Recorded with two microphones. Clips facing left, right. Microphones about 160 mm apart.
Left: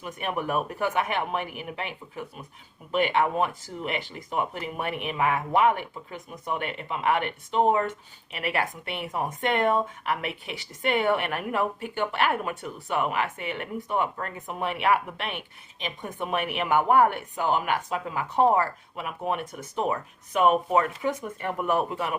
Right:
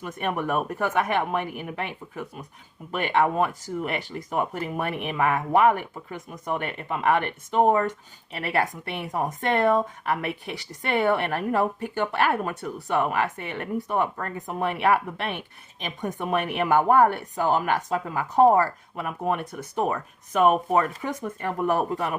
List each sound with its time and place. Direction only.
0.2 s a woman's voice: 45° right (ahead or behind)